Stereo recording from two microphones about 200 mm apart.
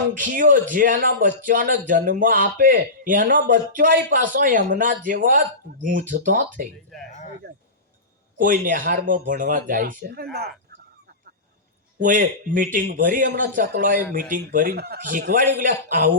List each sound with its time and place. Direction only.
0.1 s speech: 45° right (ahead or behind)
6.9 s speech: centre (ahead or behind)
8.4 s speech: 45° right (ahead or behind)
11.9 s speech: 40° right (ahead or behind)